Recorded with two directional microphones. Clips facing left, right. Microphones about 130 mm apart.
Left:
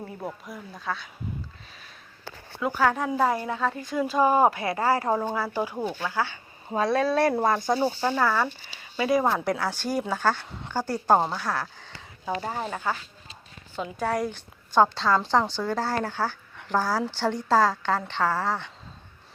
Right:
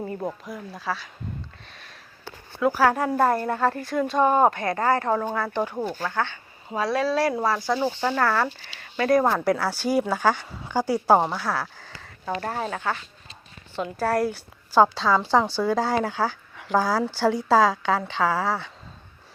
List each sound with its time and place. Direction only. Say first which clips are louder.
0.4 s speech: right 3 dB; centre (ahead or behind)
1.7 s sniff: right 2 dB; centre (ahead or behind)
2.6 s speech: right 4 dB; 5° right (ahead or behind)
3.5 s speech: right 4 dB; 70° right (ahead or behind)
3.8 s speech: right 2 dB; centre (ahead or behind)
6.7 s speech: even; 45° left (ahead or behind)
7.7 s speech: even; 30° left (ahead or behind)
8.2 s a woman's voice: right 2 dB; centre (ahead or behind)